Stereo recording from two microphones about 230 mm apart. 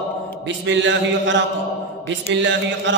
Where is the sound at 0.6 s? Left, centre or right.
Right.